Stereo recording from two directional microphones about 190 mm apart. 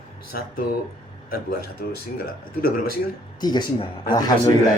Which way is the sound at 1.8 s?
50° left (ahead or behind).